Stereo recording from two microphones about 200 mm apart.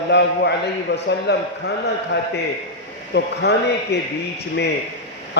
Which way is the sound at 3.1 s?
55° left (ahead or behind).